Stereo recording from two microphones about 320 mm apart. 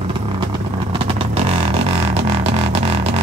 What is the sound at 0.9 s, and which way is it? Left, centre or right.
Vehicle, centre.